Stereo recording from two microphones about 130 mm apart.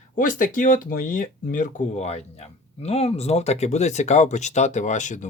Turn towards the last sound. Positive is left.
turn(degrees=70)  # may be behind; listen again after turning